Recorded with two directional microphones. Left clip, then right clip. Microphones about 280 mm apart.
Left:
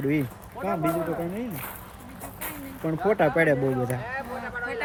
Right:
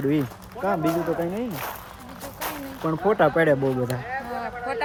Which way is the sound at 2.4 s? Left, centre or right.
Centre.